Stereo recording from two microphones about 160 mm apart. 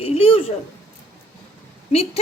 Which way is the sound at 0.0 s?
40° left (ahead or behind).